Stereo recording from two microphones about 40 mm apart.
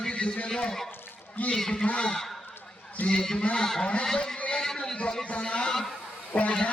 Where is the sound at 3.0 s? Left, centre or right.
Left.